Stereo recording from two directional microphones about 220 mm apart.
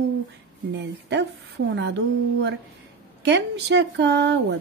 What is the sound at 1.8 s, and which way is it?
Speech, 50° right (ahead or behind).